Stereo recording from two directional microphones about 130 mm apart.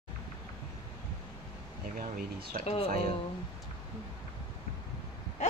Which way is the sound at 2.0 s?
90° right.